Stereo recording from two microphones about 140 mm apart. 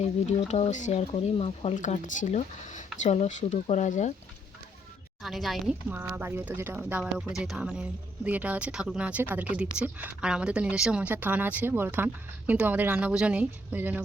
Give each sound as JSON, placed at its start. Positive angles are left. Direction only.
{"t": 0.0, "sound": "speech", "side_deg": 55}
{"t": 1.7, "sound": "speech", "side_deg": 65}
{"t": 5.2, "sound": "speech", "side_deg": 0}
{"t": 5.9, "sound": "speech", "side_deg": -15}